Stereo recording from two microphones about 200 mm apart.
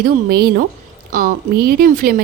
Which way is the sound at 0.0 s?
50° right (ahead or behind).